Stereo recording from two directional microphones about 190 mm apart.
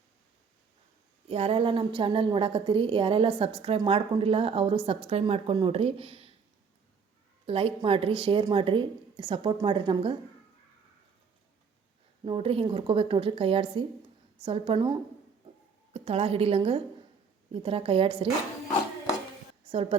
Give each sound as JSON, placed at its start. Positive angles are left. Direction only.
{"t": 1.3, "sound": "a woman's voice", "side_deg": -30}
{"t": 7.4, "sound": "a woman's voice", "side_deg": -30}
{"t": 12.2, "sound": "a woman's voice", "side_deg": -30}
{"t": 19.7, "sound": "a woman's voice", "side_deg": -30}